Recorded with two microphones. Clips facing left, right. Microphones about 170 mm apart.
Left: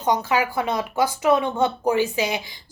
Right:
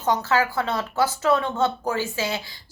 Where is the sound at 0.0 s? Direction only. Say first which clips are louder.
Left 1 dB; 15° left (ahead or behind).